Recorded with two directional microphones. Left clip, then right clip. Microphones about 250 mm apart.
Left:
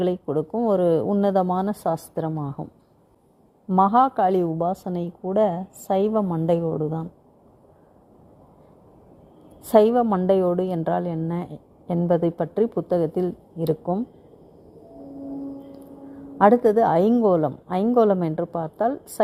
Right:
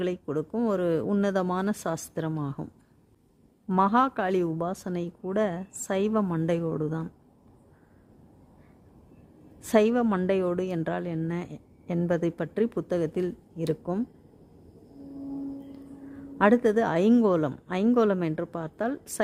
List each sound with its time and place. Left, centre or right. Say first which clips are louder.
0.0 s a woman's voice: left 6 dB; centre
1.6 s a woman's voice: left 6 dB; right
3.7 s a woman's voice: left 6 dB; centre
9.6 s a woman's voice: left 6 dB; centre
16.4 s a woman's voice: left 6 dB; centre